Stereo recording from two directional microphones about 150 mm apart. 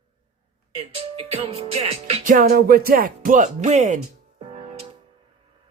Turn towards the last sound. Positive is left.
turn(degrees=-40)  # may be behind; listen again after turning